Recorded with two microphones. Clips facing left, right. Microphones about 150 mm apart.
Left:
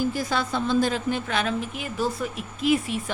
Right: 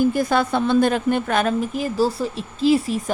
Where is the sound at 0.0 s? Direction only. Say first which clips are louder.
Right 7 dB; 55° right (ahead or behind).